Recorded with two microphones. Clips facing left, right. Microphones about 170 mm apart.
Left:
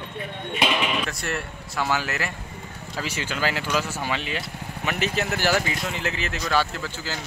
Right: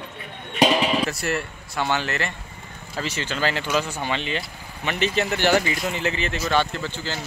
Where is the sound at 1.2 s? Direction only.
Centre (ahead or behind).